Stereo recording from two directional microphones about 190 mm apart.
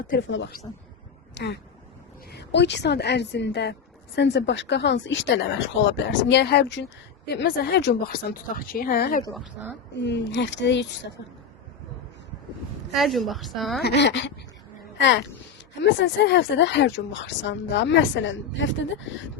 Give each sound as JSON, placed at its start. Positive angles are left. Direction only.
{"t": 0.2, "sound": "speech", "side_deg": 75}
{"t": 1.4, "sound": "speech", "side_deg": 65}
{"t": 9.3, "sound": "speech", "side_deg": 0}
{"t": 10.0, "sound": "speech", "side_deg": 65}
{"t": 12.9, "sound": "speech", "side_deg": 0}
{"t": 13.8, "sound": "a woman's voice", "side_deg": 65}